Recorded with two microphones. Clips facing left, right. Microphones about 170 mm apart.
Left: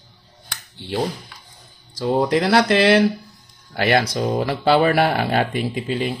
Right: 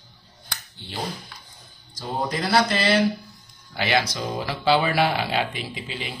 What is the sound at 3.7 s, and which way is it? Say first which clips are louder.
Speech: left 5 dB; 55° left (ahead or behind).